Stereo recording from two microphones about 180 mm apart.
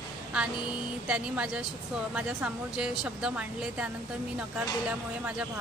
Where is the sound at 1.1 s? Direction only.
5° right (ahead or behind).